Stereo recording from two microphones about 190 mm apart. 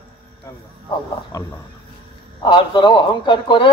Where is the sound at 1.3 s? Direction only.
20° left (ahead or behind).